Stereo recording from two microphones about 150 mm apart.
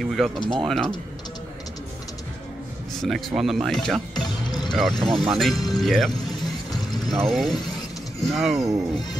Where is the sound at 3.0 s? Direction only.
Centre (ahead or behind).